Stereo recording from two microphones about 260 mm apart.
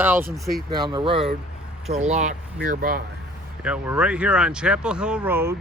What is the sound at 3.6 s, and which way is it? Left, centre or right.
Speech, centre.